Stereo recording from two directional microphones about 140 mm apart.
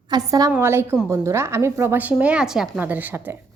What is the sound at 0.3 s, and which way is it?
A woman's voice, 25° right (ahead or behind).